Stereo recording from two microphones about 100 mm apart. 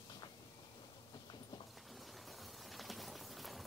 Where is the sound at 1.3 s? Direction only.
45° left (ahead or behind).